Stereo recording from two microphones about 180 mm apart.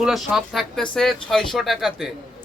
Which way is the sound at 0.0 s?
Centre (ahead or behind).